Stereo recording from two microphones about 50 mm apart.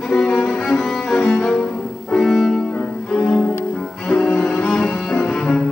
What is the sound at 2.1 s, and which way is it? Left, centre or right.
Music, centre.